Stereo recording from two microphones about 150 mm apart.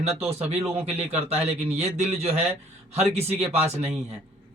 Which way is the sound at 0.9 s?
45° right (ahead or behind).